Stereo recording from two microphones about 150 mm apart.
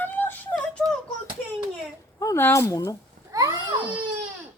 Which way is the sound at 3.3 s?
20° right (ahead or behind).